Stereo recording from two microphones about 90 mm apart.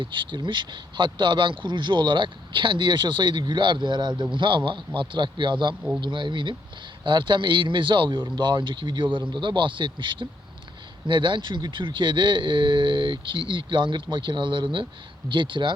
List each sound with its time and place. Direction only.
0.0 s speech: 65° right (ahead or behind)